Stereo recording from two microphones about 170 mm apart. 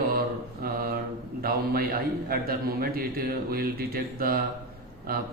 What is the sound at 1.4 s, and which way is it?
A man's voice, 60° right (ahead or behind).